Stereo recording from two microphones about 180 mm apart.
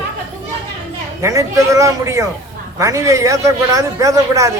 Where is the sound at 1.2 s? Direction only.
15° right (ahead or behind).